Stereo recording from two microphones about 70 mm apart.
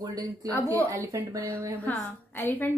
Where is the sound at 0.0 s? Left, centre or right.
Right.